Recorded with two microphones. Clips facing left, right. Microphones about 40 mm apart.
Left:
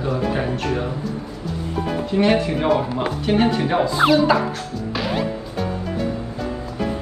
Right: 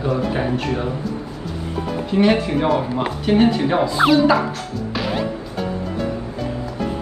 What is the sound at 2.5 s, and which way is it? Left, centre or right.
Speech, centre.